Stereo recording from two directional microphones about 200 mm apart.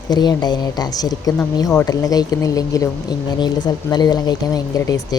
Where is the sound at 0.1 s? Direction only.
20° left (ahead or behind).